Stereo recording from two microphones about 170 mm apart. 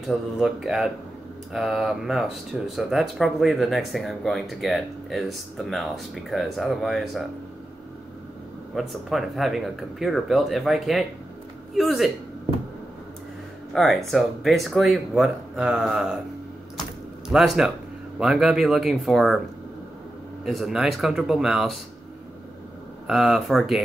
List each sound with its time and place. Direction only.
0.0 s speech: centre (ahead or behind)
8.7 s speech: centre (ahead or behind)
13.7 s speech: centre (ahead or behind)
17.3 s speech: centre (ahead or behind)
20.4 s speech: centre (ahead or behind)
23.0 s speech: centre (ahead or behind)